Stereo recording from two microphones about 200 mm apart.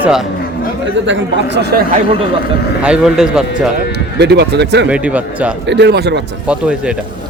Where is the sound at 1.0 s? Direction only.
60° right (ahead or behind).